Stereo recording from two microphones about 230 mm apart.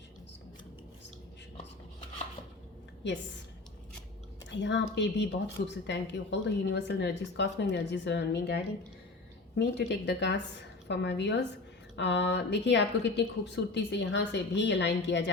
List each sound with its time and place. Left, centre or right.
3.0 s speech: left
4.6 s speech: left